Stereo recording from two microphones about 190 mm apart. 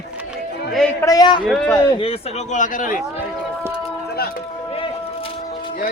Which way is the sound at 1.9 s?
30° left (ahead or behind).